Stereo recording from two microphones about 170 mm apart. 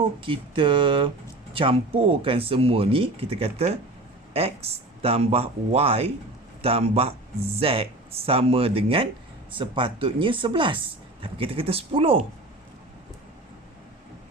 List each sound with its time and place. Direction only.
0.2 s speech: 30° right (ahead or behind)